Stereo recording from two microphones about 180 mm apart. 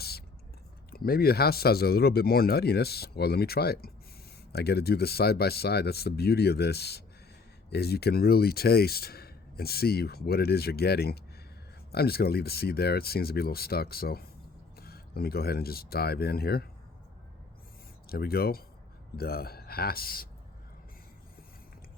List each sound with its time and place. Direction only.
0.9 s speech: 55° left (ahead or behind)
18.1 s speech: 60° left (ahead or behind)